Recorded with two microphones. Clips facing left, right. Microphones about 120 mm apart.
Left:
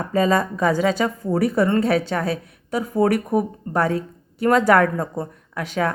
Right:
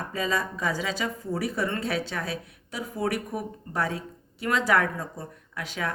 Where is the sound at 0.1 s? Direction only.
50° left (ahead or behind).